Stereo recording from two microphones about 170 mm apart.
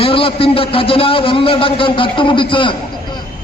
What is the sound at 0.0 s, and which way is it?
A man's voice, 30° left (ahead or behind).